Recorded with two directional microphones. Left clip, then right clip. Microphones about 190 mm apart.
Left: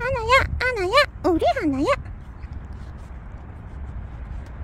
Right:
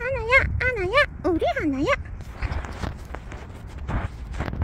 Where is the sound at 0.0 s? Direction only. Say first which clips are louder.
Left 1 dB; 15° left (ahead or behind).